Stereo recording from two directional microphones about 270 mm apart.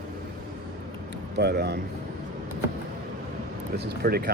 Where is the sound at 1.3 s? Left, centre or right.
Right.